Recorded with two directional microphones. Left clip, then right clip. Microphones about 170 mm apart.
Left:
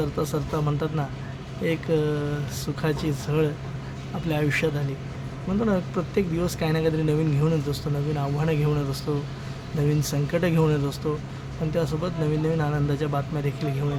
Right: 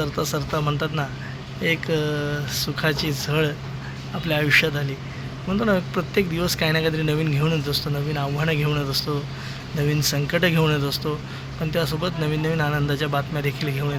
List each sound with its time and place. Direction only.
0.0 s a man's voice: 15° left (ahead or behind)